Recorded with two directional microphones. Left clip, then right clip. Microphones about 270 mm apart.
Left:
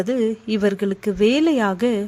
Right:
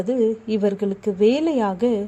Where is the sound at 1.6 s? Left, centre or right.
Left.